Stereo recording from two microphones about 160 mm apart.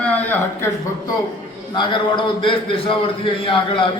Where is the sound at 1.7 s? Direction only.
30° left (ahead or behind).